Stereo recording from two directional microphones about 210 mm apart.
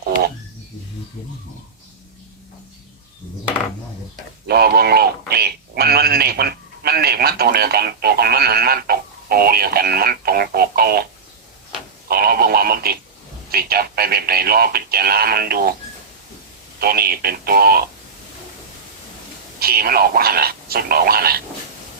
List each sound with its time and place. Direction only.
4.4 s a man's voice: 50° right (ahead or behind)
12.0 s a man's voice: 45° right (ahead or behind)
16.8 s a man's voice: 45° right (ahead or behind)
19.5 s a man's voice: 45° right (ahead or behind)